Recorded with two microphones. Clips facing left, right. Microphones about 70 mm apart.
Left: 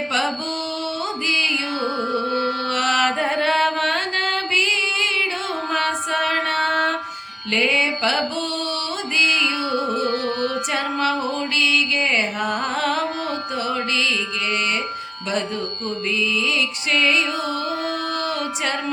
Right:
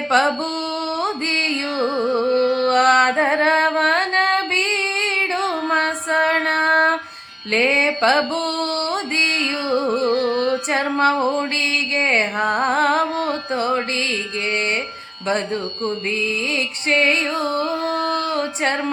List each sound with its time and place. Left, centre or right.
0.1 s music: right
2.3 s music: left
2.6 s music: right